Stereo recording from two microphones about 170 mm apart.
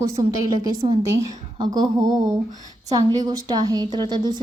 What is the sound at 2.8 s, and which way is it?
A woman's voice, 20° right (ahead or behind).